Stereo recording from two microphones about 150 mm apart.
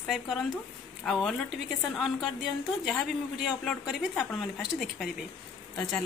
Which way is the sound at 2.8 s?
Centre (ahead or behind).